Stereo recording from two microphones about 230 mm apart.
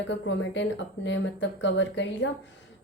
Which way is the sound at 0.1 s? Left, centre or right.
Left.